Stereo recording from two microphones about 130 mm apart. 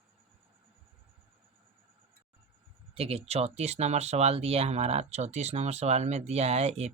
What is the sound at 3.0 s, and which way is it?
Speech, 50° right (ahead or behind).